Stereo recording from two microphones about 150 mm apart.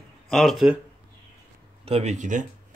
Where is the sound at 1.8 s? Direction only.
45° right (ahead or behind).